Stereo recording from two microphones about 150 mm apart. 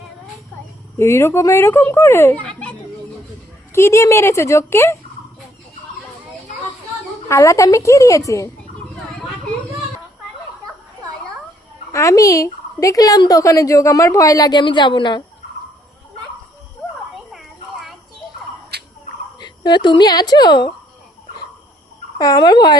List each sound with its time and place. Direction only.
0.9 s speech: 20° left (ahead or behind)
7.3 s speech: 20° left (ahead or behind)
11.9 s speech: 20° left (ahead or behind)
18.7 s a sound: 90° right
19.4 s speech: 30° left (ahead or behind)
22.2 s speech: 25° left (ahead or behind)